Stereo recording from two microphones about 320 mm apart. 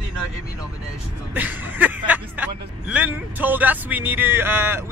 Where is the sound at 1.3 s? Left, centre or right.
Centre.